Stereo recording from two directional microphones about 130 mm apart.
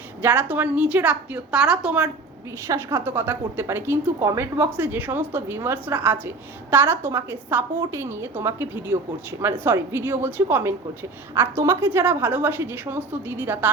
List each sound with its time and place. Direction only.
0.2 s a woman's voice: 15° right (ahead or behind)